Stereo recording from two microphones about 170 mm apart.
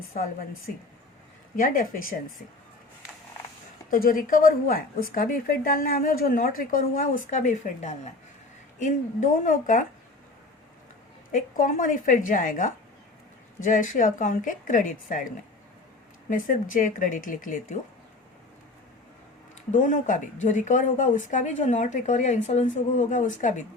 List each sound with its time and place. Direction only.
0.1 s a woman's voice: 55° left (ahead or behind)
1.5 s speech: 55° left (ahead or behind)
3.8 s a woman's voice: 55° left (ahead or behind)
11.3 s speech: 50° left (ahead or behind)
16.3 s speech: 50° left (ahead or behind)
19.7 s speech: 50° left (ahead or behind)